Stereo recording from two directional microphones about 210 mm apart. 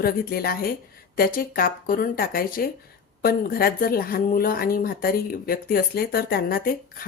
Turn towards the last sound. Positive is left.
turn(degrees=45)  # may be behind; listen again after turning